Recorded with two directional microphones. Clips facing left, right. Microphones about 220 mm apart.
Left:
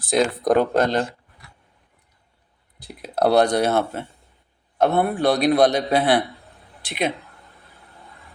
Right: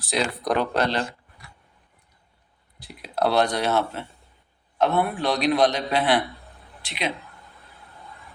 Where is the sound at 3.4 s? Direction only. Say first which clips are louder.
Left 5 dB; 45° left (ahead or behind).